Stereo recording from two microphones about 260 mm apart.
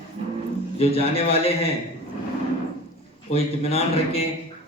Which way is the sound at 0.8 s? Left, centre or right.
Left.